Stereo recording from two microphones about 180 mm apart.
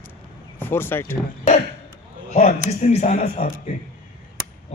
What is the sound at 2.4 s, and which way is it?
Speech, 35° left (ahead or behind).